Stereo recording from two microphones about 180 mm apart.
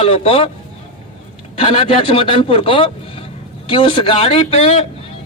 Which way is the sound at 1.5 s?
30° left (ahead or behind).